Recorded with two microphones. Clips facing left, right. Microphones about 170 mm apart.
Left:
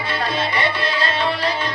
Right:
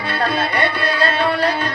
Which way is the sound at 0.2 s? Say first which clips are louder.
Right 4 dB; 60° right (ahead or behind).